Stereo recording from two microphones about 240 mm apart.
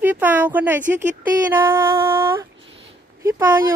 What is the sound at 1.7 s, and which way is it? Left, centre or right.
Speech, centre.